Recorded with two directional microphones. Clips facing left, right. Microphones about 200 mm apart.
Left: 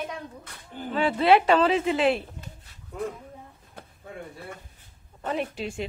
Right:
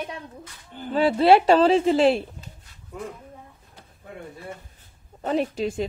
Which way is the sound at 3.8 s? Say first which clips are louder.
Left 7 dB; 55° left (ahead or behind).